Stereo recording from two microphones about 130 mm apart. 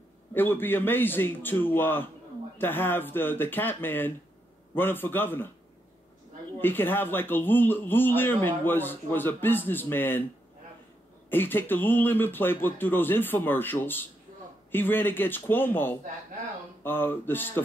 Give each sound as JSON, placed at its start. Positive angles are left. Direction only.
{"t": 0.3, "sound": "speech", "side_deg": 15}
{"t": 6.6, "sound": "speech", "side_deg": 15}
{"t": 11.2, "sound": "speech", "side_deg": 15}